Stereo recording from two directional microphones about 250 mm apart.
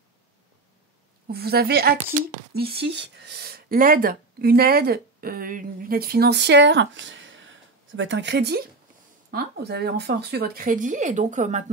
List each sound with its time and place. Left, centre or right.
1.2 s speech: right